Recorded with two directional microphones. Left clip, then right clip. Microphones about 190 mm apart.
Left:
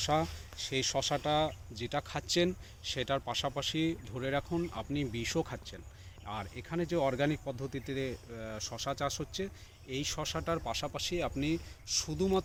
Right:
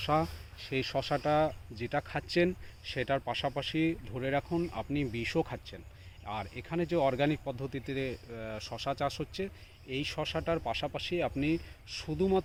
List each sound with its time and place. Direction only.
0.0 s speech: 40° right (ahead or behind)